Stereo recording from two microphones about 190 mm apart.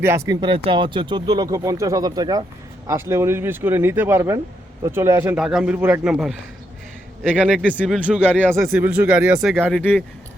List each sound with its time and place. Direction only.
0.0 s a man's voice: 15° right (ahead or behind)
0.3 s a man's voice: 25° right (ahead or behind); by 7.7 s 5° right (ahead or behind)
7.7 s speech: 10° left (ahead or behind)
7.9 s speech: 5° right (ahead or behind)